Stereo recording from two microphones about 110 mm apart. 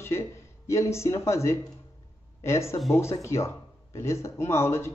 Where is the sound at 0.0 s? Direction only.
25° left (ahead or behind).